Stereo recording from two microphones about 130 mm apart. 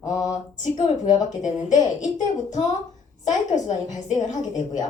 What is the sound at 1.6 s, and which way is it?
A woman's voice, 70° left (ahead or behind).